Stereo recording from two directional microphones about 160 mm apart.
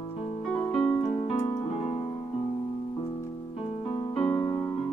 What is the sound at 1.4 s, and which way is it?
Keyboard, 35° left (ahead or behind).